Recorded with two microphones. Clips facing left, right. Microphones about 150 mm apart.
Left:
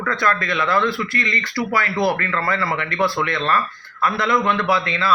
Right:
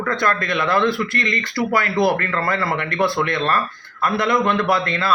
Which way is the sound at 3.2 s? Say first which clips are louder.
Right 1 dB; 50° right (ahead or behind).